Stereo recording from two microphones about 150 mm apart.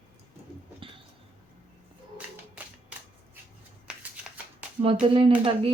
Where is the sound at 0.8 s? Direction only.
35° right (ahead or behind).